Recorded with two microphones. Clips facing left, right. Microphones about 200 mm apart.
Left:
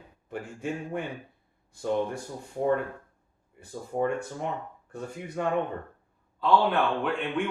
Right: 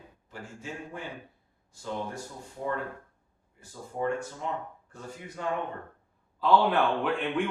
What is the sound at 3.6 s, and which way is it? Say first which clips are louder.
Speech: left 3 dB; 60° left (ahead or behind).